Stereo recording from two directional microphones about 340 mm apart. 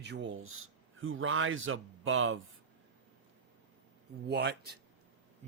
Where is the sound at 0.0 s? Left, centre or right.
Right.